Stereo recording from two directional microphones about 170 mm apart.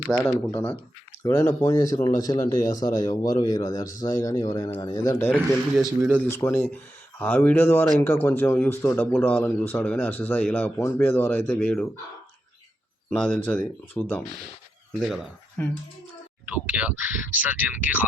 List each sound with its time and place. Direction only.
0.3 s speech: 15° left (ahead or behind)
5.3 s speech: centre (ahead or behind)
6.3 s speech: 15° left (ahead or behind)
13.1 s speech: 10° left (ahead or behind)
15.0 s speech: centre (ahead or behind)
15.6 s speech: 10° left (ahead or behind)
16.5 s speech: 10° right (ahead or behind)